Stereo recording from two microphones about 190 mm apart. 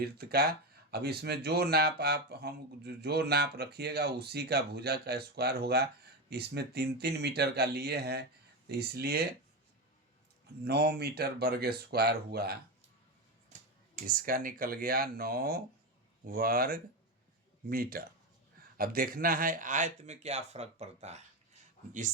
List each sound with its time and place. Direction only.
0.0 s speech: 55° right (ahead or behind)
10.7 s speech: 55° right (ahead or behind)
13.9 s speech: 45° right (ahead or behind)